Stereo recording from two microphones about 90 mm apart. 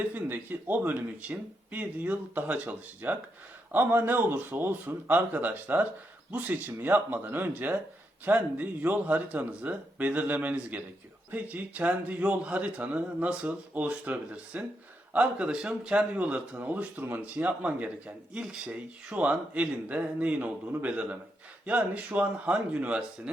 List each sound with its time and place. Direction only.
0.0 s speech: 20° right (ahead or behind)